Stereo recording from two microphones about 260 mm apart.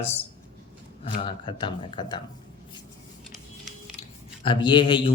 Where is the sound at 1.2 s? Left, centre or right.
Centre.